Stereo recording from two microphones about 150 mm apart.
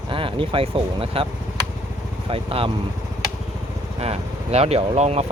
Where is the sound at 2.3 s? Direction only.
40° right (ahead or behind).